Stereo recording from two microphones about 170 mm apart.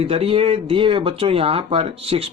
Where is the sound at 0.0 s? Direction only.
35° right (ahead or behind).